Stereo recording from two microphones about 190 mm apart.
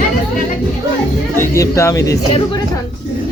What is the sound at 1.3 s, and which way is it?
Speech, 15° left (ahead or behind).